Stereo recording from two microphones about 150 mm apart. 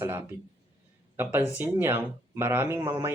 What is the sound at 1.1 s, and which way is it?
Speech, 15° right (ahead or behind).